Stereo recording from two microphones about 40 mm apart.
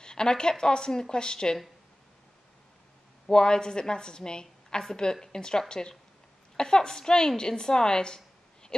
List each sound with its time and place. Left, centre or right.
0.0 s a woman's voice: centre
3.3 s a woman's voice: centre